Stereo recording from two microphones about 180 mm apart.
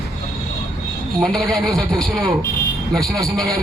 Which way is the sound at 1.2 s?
5° left (ahead or behind).